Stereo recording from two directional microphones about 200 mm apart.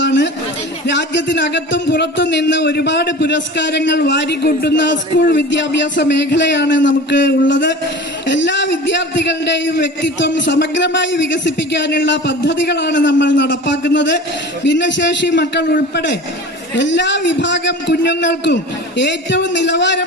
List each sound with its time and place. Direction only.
0.0 s chatter: 65° left (ahead or behind)
0.9 s speech: 65° left (ahead or behind)